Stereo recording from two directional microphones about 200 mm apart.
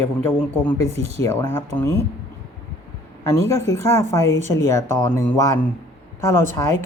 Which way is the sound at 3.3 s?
15° left (ahead or behind).